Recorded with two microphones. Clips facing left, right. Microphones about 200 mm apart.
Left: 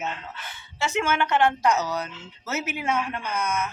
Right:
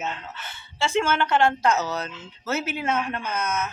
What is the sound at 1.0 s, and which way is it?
A woman's voice, 15° left (ahead or behind).